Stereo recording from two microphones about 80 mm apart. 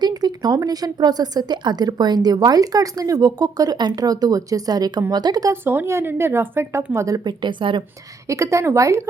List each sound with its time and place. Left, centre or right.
0.0 s a woman's voice: right
5.6 s speech: right
6.9 s speech: right
7.3 s a woman's voice: right
8.3 s speech: right